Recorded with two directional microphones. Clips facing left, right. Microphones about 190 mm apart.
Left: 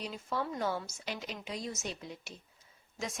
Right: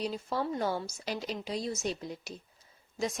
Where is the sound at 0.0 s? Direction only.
35° right (ahead or behind).